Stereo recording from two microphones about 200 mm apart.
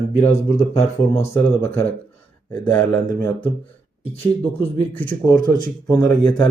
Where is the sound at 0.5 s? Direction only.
35° left (ahead or behind).